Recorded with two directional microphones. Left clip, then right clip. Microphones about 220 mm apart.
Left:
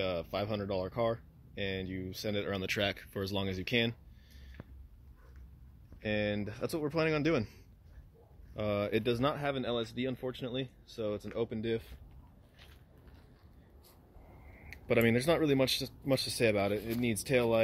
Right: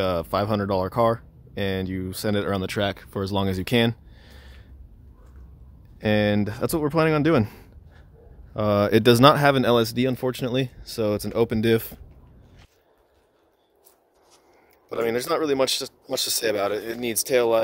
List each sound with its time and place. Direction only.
0.0 s speech: 30° right (ahead or behind)
5.9 s speech: 35° right (ahead or behind)
8.5 s speech: 30° right (ahead or behind)
15.0 s speech: 25° right (ahead or behind)